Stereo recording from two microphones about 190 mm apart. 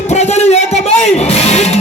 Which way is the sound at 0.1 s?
35° left (ahead or behind).